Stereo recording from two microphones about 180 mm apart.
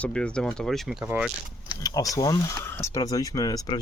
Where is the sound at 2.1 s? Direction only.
25° left (ahead or behind).